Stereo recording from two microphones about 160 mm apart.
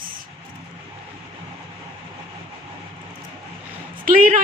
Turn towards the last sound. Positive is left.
turn(degrees=-60)  # may be behind; listen again after turning